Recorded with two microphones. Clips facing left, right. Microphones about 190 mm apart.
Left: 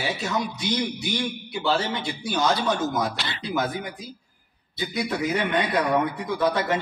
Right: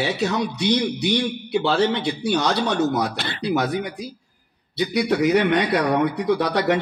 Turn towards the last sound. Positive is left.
turn(degrees=-70)  # may be behind; listen again after turning